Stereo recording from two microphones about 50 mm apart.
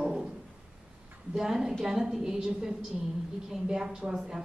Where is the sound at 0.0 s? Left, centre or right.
Centre.